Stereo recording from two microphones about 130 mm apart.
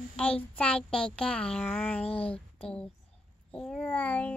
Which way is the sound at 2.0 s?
45° left (ahead or behind).